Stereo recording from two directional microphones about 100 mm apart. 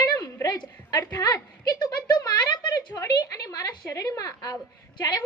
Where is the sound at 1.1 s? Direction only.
40° left (ahead or behind).